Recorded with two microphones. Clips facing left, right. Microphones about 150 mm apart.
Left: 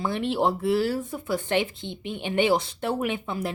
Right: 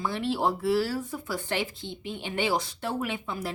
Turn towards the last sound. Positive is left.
turn(degrees=25)  # may be behind; listen again after turning